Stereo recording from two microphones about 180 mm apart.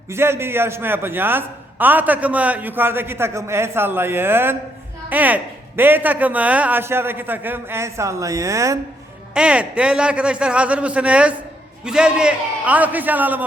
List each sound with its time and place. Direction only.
0.1 s a man's voice: 15° right (ahead or behind)
9.3 s a man's voice: 5° right (ahead or behind)